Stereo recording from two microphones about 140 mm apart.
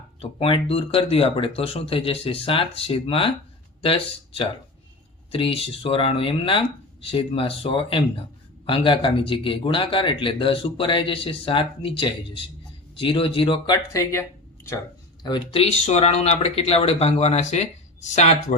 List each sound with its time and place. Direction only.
0.2 s speech: 40° left (ahead or behind)
5.3 s speech: 40° left (ahead or behind)
13.9 s speech: 20° left (ahead or behind)
15.2 s speech: 35° left (ahead or behind); by 18.3 s 50° left (ahead or behind)